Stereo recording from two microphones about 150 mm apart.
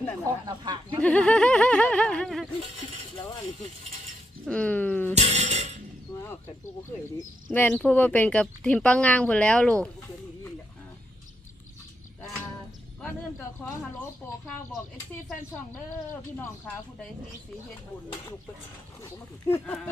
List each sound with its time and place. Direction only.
0.3 s speech: 25° right (ahead or behind)
1.0 s speech: 10° left (ahead or behind)
4.4 s speech: 10° left (ahead or behind)
5.1 s speech: 45° right (ahead or behind)
7.4 s speech: 15° left (ahead or behind)
14.2 s speech: 10° left (ahead or behind)
19.0 s speech: 15° left (ahead or behind)